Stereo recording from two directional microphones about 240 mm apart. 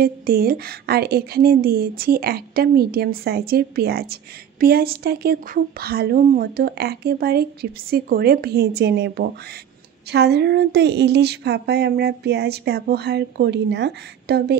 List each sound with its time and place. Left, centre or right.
0.0 s speech: right